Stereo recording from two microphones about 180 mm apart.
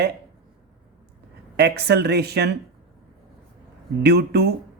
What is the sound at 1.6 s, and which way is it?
Speech, 65° right (ahead or behind).